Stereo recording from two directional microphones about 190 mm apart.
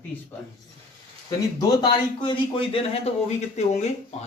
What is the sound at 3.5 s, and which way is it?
Speech, 35° left (ahead or behind).